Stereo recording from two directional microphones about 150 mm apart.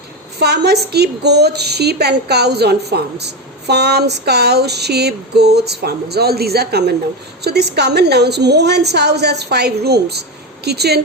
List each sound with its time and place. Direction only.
0.3 s a woman's voice: 90° right